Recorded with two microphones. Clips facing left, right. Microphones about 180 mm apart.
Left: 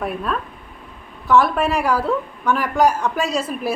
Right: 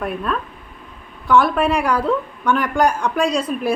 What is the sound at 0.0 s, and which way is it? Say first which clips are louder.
A woman's voice: right 1 dB; centre (ahead or behind).